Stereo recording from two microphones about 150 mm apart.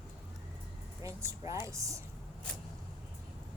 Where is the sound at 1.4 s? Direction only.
20° right (ahead or behind).